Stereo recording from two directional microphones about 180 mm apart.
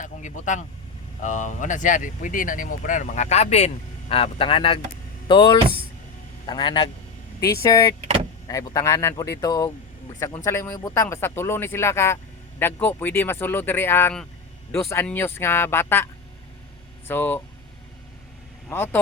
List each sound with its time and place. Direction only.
0.0 s a man's voice: 45° left (ahead or behind); by 7.9 s 20° left (ahead or behind)
8.0 s vehicle: 35° right (ahead or behind)
8.4 s speech: 20° left (ahead or behind)
17.1 s speech: 10° left (ahead or behind)
18.7 s speech: 10° left (ahead or behind)